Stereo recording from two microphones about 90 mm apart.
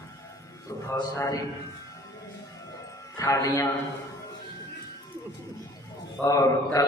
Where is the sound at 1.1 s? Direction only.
35° left (ahead or behind).